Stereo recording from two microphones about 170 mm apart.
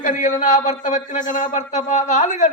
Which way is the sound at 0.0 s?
50° left (ahead or behind).